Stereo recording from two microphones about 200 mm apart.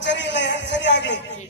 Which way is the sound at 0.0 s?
60° left (ahead or behind).